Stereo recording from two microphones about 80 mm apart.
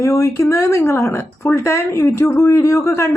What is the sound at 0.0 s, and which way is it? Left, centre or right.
Speech, left.